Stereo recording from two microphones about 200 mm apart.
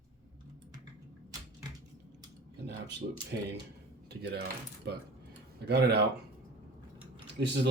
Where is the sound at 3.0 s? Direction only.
40° right (ahead or behind).